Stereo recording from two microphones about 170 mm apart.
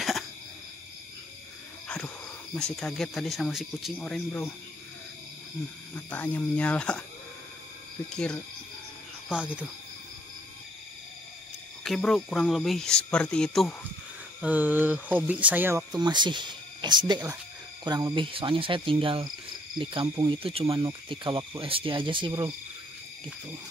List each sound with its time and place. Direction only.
2.5 s speech: 5° left (ahead or behind)
5.9 s speech: 10° left (ahead or behind)
9.3 s speech: 5° right (ahead or behind)
11.8 s speech: centre (ahead or behind)
14.4 s speech: 10° right (ahead or behind)
15.9 s speech: 25° right (ahead or behind)
17.8 s cricket: 25° right (ahead or behind)
19.8 s speech: 30° right (ahead or behind)